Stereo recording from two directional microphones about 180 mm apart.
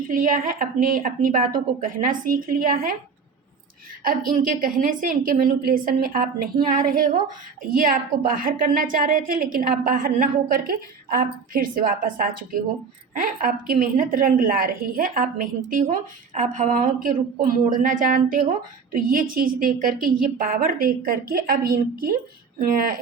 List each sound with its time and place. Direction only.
0.1 s a woman's voice: 50° right (ahead or behind)
4.0 s a woman's voice: 50° right (ahead or behind)